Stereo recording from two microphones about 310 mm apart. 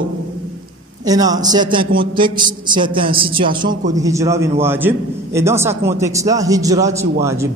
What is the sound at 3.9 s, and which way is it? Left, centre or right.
A man's voice, centre.